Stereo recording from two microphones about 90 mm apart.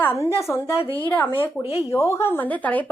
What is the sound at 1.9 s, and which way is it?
A woman's voice, 35° left (ahead or behind).